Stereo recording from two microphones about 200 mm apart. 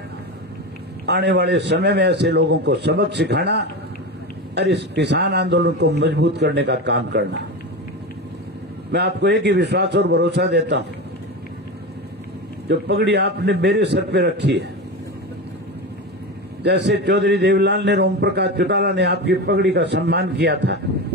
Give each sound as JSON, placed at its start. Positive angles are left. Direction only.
{"t": 1.0, "sound": "a man's voice", "side_deg": -60}
{"t": 8.9, "sound": "a man's voice", "side_deg": -60}
{"t": 12.6, "sound": "a man's voice", "side_deg": -55}
{"t": 16.6, "sound": "a man's voice", "side_deg": -60}